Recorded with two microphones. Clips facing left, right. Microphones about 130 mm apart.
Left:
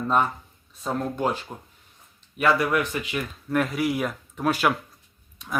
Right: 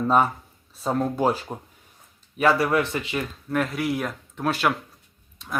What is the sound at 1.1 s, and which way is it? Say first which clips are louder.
Speech: right 3 dB; 35° right (ahead or behind).